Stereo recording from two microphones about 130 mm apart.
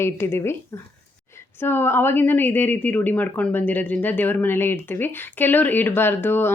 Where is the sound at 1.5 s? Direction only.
15° left (ahead or behind).